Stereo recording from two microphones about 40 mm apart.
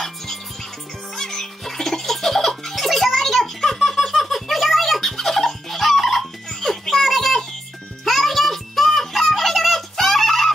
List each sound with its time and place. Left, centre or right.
1.1 s music: centre